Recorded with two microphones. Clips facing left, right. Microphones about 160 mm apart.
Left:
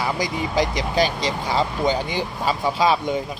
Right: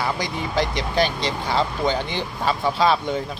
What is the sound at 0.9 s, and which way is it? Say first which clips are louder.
Speech: left 1 dB; 40° left (ahead or behind).